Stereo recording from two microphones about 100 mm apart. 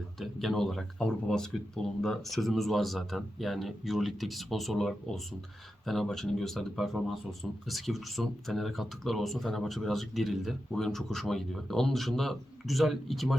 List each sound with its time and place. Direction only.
0.2 s speech: centre (ahead or behind)